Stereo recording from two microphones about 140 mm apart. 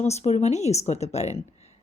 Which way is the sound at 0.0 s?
50° left (ahead or behind).